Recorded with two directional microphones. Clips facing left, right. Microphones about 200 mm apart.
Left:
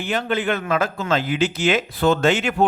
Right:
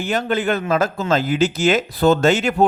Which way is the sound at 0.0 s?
40° right (ahead or behind).